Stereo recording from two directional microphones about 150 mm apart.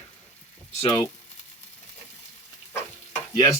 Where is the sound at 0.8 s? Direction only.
30° left (ahead or behind).